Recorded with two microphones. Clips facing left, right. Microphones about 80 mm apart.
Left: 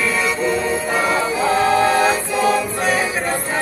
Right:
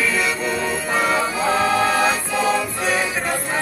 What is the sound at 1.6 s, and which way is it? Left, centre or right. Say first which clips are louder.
Music: left 4 dB; left.